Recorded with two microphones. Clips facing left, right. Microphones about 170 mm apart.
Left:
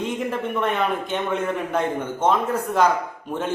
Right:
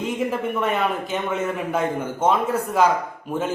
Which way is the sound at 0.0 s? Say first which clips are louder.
Right 1 dB; 5° right (ahead or behind).